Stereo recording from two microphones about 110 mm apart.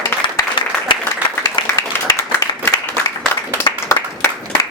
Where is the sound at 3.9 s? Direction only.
25° left (ahead or behind).